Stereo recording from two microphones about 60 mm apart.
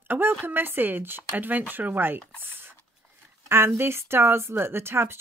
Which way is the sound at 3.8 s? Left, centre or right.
Right.